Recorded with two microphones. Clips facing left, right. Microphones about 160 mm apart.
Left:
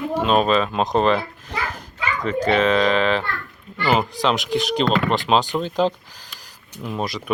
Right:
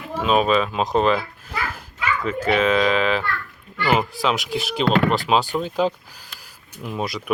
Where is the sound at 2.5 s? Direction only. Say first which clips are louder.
Left 1 dB; 5° right (ahead or behind).